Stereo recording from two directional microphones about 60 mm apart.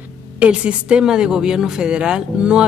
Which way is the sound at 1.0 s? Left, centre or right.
Centre.